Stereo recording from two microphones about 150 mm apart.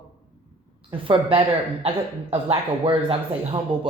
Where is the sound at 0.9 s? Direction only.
35° right (ahead or behind).